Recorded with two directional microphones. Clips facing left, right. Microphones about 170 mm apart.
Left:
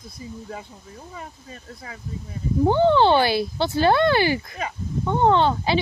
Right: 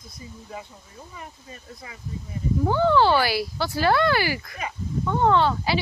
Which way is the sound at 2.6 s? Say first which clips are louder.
Left 3 dB; 20° left (ahead or behind).